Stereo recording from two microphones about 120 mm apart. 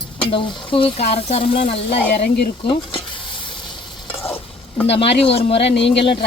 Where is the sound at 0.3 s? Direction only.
45° left (ahead or behind).